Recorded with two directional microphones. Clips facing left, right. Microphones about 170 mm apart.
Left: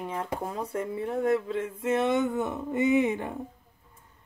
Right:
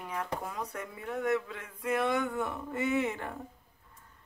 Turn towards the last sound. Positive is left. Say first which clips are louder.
# left 7 dB
turn(degrees=20)  # may be behind; listen again after turning